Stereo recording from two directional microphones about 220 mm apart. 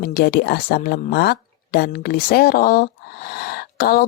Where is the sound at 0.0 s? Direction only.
40° left (ahead or behind).